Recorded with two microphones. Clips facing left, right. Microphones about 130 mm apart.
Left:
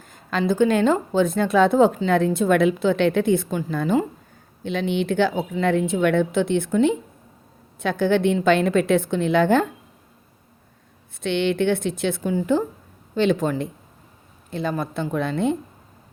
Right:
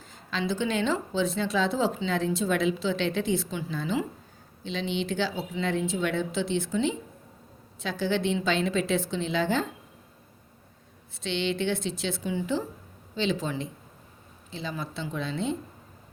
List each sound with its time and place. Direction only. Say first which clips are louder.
0.0 s a woman's voice: left 7 dB; 50° left (ahead or behind)
11.2 s speech: left 7 dB; 55° left (ahead or behind)